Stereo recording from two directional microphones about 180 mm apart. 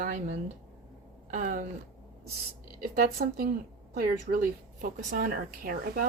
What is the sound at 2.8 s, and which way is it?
A woman's voice, 55° right (ahead or behind).